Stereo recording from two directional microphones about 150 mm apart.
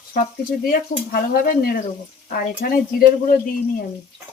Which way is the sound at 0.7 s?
75° left (ahead or behind).